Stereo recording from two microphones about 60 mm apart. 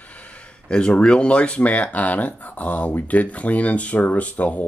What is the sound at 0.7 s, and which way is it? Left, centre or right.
Speech, centre.